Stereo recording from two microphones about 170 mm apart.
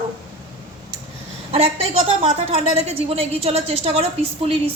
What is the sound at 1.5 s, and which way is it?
A woman's voice, 35° right (ahead or behind).